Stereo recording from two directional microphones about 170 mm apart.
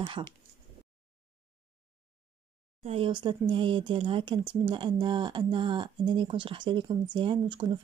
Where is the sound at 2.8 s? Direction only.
35° right (ahead or behind).